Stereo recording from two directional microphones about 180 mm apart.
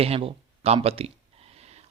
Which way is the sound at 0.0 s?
30° right (ahead or behind).